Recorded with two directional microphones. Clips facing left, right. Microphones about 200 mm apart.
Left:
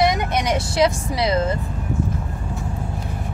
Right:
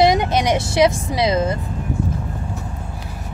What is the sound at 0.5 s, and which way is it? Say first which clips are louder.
Speech: right 2 dB; 20° right (ahead or behind).